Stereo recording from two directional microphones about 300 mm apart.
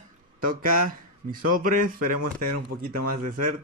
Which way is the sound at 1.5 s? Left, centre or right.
Right.